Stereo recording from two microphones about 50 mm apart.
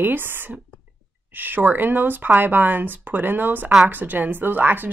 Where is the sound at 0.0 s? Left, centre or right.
Right.